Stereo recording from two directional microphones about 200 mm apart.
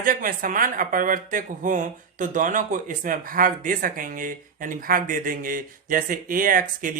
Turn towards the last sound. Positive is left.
turn(degrees=-45)  # may be behind; listen again after turning